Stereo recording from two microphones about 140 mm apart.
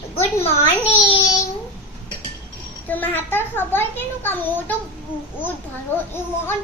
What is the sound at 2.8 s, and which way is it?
A child's voice, 10° left (ahead or behind).